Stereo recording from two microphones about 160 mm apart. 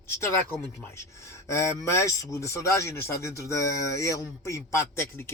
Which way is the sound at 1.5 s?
20° left (ahead or behind).